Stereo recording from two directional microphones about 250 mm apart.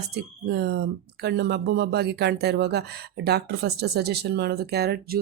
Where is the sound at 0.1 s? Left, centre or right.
Right.